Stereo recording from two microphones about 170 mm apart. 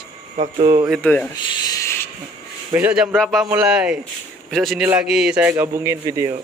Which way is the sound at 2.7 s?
10° right (ahead or behind).